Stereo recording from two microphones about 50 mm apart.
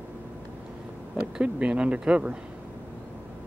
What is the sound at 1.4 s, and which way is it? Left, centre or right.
Speech, right.